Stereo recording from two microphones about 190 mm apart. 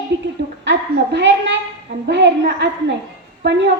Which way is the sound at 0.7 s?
70° right (ahead or behind).